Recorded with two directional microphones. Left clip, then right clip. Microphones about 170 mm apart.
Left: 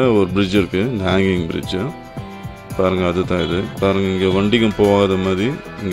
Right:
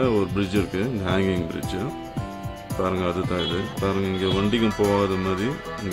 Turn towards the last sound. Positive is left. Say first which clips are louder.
# left 7 dB
turn(degrees=40)  # may be behind; listen again after turning